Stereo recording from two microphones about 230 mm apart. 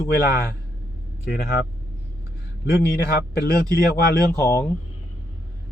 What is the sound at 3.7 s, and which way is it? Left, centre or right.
Speech, left.